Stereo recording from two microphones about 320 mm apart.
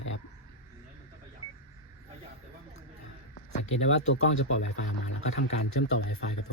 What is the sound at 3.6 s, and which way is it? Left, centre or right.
Speech, left.